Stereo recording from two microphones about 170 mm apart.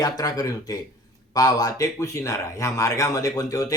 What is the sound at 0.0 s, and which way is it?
Speech, 20° left (ahead or behind).